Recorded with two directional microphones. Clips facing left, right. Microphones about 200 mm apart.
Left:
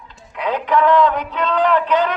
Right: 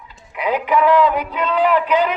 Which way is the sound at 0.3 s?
10° right (ahead or behind).